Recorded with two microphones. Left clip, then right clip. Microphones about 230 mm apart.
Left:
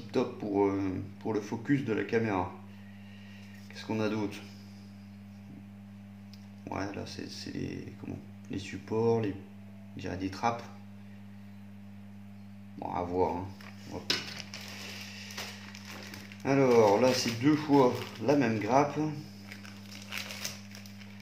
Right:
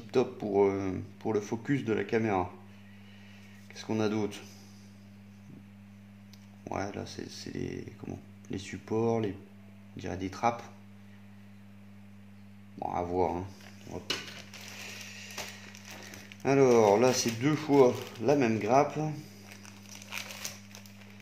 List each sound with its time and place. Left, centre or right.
0.1 s speech: right
3.7 s speech: right
6.7 s speech: right
12.7 s speech: right
13.9 s a sound: right
16.4 s speech: right